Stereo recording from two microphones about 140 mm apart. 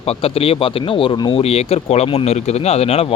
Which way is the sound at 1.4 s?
45° left (ahead or behind).